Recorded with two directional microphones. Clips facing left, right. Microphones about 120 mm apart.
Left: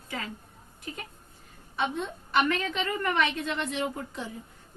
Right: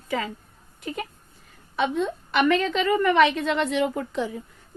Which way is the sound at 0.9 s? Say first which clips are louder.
Right 8 dB; 90° right.